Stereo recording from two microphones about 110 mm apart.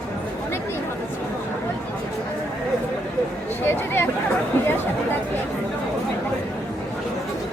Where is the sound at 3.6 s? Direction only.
20° left (ahead or behind).